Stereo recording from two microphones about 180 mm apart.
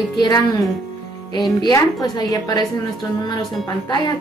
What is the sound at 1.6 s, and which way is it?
A woman's voice, 20° left (ahead or behind).